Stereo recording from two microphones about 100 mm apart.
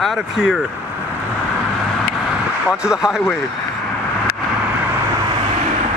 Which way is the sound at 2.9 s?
5° right (ahead or behind).